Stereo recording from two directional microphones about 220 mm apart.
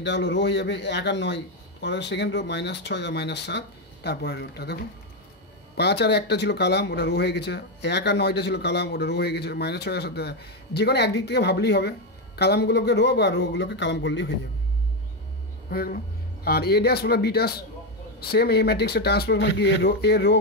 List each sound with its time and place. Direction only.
0.0 s speech: 55° left (ahead or behind)
5.8 s speech: 50° left (ahead or behind)
15.7 s speech: 45° left (ahead or behind)